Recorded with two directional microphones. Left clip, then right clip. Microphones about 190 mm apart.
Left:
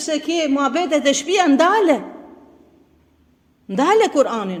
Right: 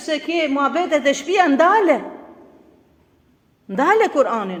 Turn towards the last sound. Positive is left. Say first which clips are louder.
# even
turn(degrees=35)  # may be behind; listen again after turning